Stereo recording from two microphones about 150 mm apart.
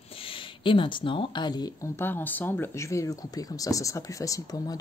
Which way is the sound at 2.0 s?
15° left (ahead or behind).